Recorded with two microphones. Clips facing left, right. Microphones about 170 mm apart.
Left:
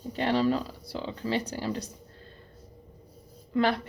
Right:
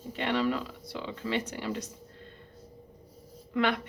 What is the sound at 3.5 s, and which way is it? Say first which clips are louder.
Speech: left 3 dB; 35° left (ahead or behind).